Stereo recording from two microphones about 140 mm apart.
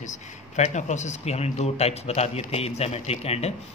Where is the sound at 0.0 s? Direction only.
60° left (ahead or behind).